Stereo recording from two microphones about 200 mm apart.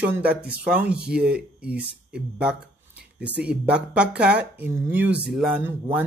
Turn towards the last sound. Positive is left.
turn(degrees=-5)  # may be behind; listen again after turning